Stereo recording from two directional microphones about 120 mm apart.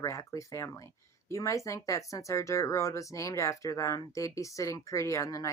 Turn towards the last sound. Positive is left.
turn(degrees=25)  # may be behind; listen again after turning